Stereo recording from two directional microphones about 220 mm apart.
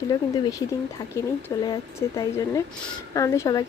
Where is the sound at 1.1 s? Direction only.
15° left (ahead or behind).